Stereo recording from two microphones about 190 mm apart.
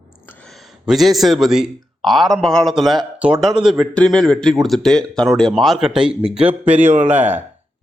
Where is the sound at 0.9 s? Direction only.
Centre (ahead or behind).